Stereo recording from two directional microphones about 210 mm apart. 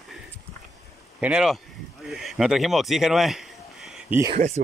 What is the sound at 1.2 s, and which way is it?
Speech, 5° right (ahead or behind).